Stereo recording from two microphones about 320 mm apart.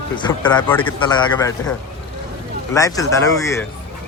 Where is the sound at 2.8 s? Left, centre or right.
Centre.